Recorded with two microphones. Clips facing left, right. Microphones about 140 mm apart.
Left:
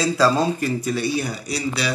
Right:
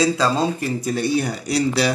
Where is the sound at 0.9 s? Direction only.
50° right (ahead or behind).